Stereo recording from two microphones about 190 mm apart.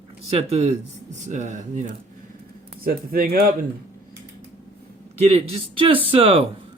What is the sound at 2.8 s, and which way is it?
Speech, 50° right (ahead or behind).